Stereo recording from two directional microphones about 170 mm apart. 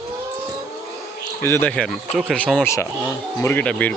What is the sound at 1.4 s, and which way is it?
Speech, 15° left (ahead or behind).